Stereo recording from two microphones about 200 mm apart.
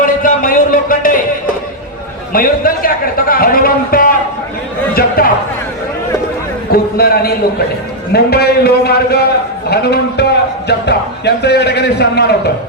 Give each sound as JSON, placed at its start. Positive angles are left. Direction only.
{"t": 0.0, "sound": "a sound", "side_deg": 45}
{"t": 2.3, "sound": "a man's voice", "side_deg": 45}
{"t": 6.7, "sound": "a man's voice", "side_deg": 50}